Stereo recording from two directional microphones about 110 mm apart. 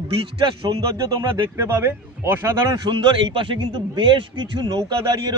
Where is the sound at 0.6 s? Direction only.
45° right (ahead or behind).